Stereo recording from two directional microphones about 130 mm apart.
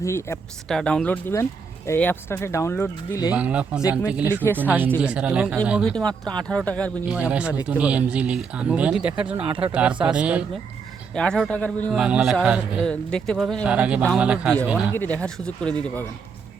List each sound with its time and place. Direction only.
0.0 s speech: 20° left (ahead or behind)
0.7 s speech: 5° left (ahead or behind)
3.3 s speech: 10° right (ahead or behind)
5.9 s speech: 5° left (ahead or behind)
7.1 s speech: 10° right (ahead or behind)
9.3 s speech: 45° right (ahead or behind)
10.0 s speech: 10° right (ahead or behind)
11.1 s speech: 5° left (ahead or behind)
11.9 s speech: 5° right (ahead or behind)
12.8 s speech: 5° left (ahead or behind)
14.9 s speech: 10° left (ahead or behind)